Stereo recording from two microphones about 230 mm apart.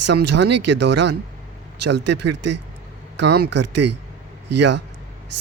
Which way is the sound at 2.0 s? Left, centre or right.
Right.